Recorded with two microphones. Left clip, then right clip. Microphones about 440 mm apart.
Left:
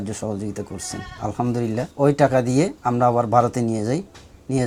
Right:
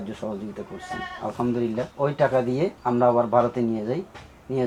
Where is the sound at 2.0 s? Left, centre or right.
Left.